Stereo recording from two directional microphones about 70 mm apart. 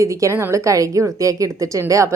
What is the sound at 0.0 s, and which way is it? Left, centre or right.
A woman's voice, right.